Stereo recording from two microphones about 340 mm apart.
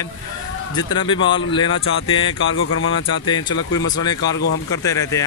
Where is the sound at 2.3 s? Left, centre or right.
Left.